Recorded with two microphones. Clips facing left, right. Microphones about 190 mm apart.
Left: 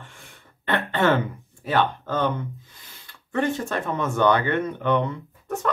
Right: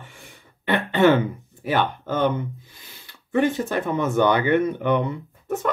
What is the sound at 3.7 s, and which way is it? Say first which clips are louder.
Speech: right 3 dB; 20° right (ahead or behind).